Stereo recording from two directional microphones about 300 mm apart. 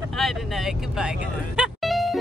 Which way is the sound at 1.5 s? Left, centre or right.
Centre.